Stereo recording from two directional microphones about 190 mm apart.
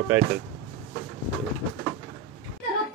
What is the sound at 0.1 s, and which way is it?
Speech, 10° right (ahead or behind).